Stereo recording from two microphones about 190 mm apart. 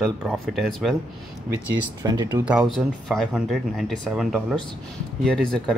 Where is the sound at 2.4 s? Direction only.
5° right (ahead or behind).